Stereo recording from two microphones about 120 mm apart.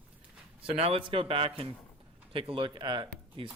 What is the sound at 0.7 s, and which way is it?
Speech, 55° right (ahead or behind).